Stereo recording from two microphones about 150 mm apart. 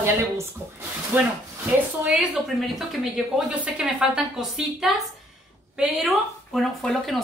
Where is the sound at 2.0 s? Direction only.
Centre (ahead or behind).